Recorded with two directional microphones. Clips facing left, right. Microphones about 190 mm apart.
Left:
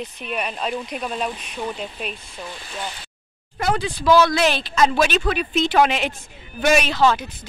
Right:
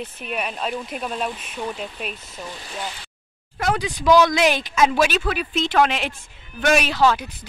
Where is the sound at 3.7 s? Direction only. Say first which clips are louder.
Even; 15° right (ahead or behind).